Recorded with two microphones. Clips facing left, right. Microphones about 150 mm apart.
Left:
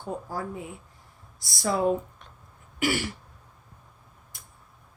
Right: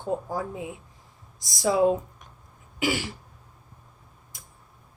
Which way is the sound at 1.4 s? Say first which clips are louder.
Right 3 dB; 15° right (ahead or behind).